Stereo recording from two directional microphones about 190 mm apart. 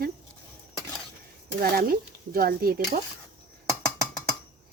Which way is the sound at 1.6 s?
50° right (ahead or behind).